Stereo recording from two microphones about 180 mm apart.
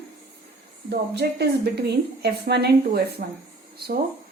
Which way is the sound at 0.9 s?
65° right (ahead or behind).